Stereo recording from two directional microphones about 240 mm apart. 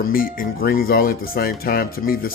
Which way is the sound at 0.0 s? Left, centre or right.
Left.